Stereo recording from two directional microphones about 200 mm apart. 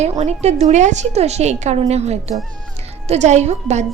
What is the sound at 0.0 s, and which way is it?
A woman's voice, 35° right (ahead or behind).